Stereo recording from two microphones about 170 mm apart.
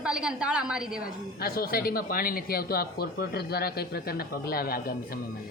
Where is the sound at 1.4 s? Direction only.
60° left (ahead or behind).